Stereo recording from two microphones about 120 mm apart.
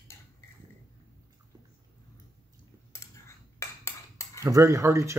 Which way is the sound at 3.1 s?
25° left (ahead or behind).